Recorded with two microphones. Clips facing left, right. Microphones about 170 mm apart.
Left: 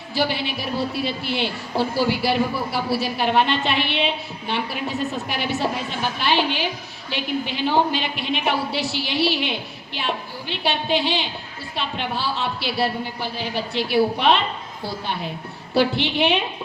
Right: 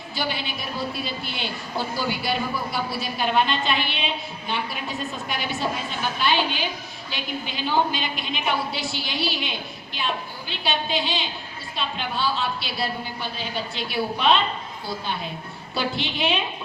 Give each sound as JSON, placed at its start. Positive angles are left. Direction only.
{"t": 0.1, "sound": "a woman's voice", "side_deg": 65}
{"t": 10.5, "sound": "a woman's voice", "side_deg": 65}
{"t": 15.7, "sound": "a woman's voice", "side_deg": 65}